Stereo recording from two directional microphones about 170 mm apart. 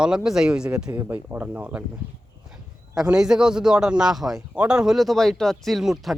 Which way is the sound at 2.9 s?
5° right (ahead or behind).